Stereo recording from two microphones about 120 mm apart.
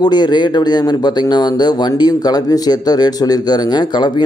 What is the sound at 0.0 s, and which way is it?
Speech, 35° left (ahead or behind).